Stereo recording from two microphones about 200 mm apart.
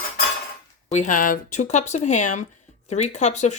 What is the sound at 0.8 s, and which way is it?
Speech, 35° left (ahead or behind).